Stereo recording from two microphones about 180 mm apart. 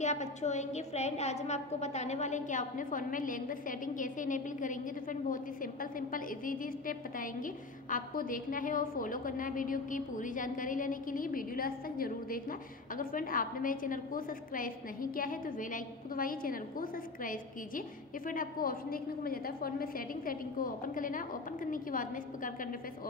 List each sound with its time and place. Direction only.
0.0 s a woman's voice: 40° left (ahead or behind)